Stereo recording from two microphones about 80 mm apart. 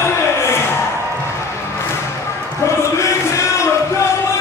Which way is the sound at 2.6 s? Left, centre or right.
Left.